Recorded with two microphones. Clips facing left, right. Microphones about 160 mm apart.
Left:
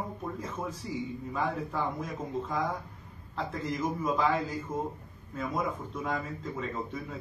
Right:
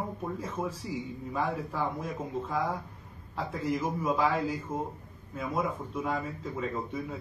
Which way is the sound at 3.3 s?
5° right (ahead or behind).